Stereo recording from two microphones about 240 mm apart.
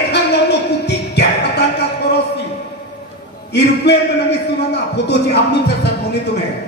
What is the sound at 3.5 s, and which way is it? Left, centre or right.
A man's voice, left.